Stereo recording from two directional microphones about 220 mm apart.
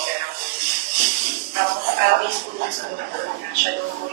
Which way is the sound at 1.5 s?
40° right (ahead or behind).